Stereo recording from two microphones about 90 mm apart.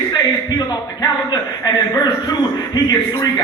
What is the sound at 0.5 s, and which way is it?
A man's voice, 50° left (ahead or behind).